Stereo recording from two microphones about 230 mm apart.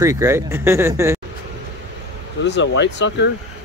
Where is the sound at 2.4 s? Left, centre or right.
Left.